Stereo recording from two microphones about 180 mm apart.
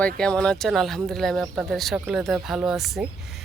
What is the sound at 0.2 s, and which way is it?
Speech, 5° left (ahead or behind).